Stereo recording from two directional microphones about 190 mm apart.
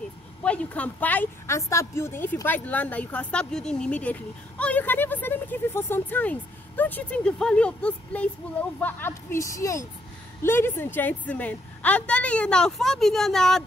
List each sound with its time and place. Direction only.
0.4 s speech: 5° left (ahead or behind)